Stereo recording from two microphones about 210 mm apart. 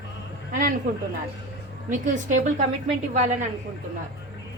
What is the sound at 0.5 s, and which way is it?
Speech, 40° right (ahead or behind).